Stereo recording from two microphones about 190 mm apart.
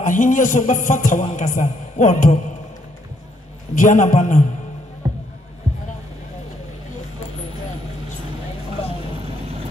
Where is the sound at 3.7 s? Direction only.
45° left (ahead or behind).